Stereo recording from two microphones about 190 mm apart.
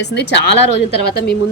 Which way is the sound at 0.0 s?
65° left (ahead or behind).